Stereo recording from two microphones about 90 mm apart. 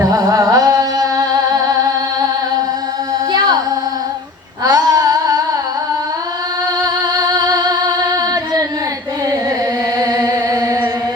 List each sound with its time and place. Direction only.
0.0 s music: 45° right (ahead or behind)
3.3 s music: 50° right (ahead or behind)
4.6 s a sound: 45° right (ahead or behind)
7.2 s music: 45° right (ahead or behind)
10.0 s music: 45° right (ahead or behind)